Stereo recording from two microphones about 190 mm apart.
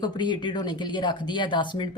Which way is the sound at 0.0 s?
25° left (ahead or behind).